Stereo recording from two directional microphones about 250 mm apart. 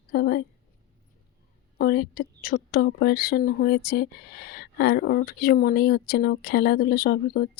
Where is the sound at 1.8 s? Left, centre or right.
Left.